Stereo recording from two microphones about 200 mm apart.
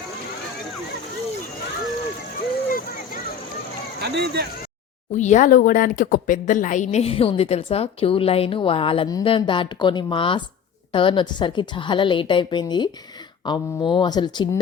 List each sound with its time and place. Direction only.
4.0 s speech: 55° right (ahead or behind)
5.1 s speech: 35° left (ahead or behind); by 14.6 s 20° left (ahead or behind)